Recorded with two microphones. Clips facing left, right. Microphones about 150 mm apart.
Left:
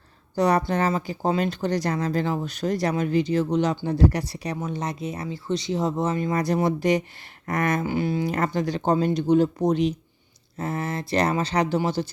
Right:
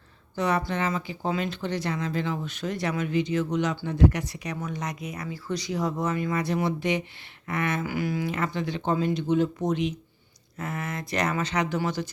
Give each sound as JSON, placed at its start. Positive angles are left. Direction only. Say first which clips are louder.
{"t": 0.3, "sound": "speech", "louder": "left 5 dB", "side_deg": 40}
{"t": 6.3, "sound": "speech", "louder": "left 4 dB", "side_deg": 40}
{"t": 7.4, "sound": "a sound", "louder": "left 4 dB", "side_deg": 40}
{"t": 7.9, "sound": "speech", "louder": "left 4 dB", "side_deg": 25}
{"t": 8.3, "sound": "speech", "louder": "left 4 dB", "side_deg": 40}